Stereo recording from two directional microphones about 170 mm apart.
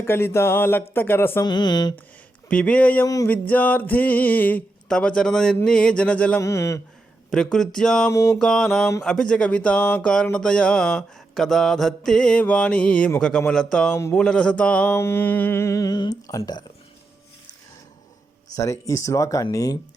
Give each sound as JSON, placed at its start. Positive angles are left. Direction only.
{"t": 0.0, "sound": "speech", "side_deg": 15}
{"t": 1.5, "sound": "speech", "side_deg": 25}
{"t": 2.5, "sound": "speech", "side_deg": 10}
{"t": 7.3, "sound": "speech", "side_deg": 5}
{"t": 8.1, "sound": "speech", "side_deg": 20}
{"t": 8.4, "sound": "speech", "side_deg": 5}
{"t": 18.5, "sound": "speech", "side_deg": 20}